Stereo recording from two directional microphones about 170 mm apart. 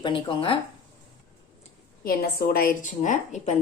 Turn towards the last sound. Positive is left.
turn(degrees=45)  # may be behind; listen again after turning